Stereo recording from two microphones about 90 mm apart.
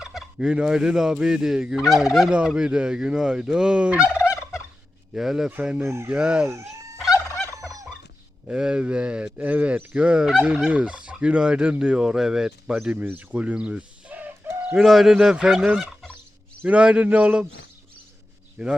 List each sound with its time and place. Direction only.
0.0 s fowl: 5° right (ahead or behind)
1.9 s speech: 5° right (ahead or behind)
4.1 s fowl: 30° left (ahead or behind)
5.1 s fowl: 5° right (ahead or behind)
5.8 s chicken: 30° right (ahead or behind)
6.1 s speech: 10° right (ahead or behind)
8.4 s speech: 10° right (ahead or behind)
13.1 s bird: 15° right (ahead or behind)
14.8 s fowl: 5° right (ahead or behind)
16.6 s speech: 15° right (ahead or behind)
18.6 s speech: 10° right (ahead or behind)